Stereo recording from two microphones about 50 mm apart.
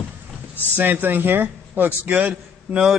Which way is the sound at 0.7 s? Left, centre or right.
Right.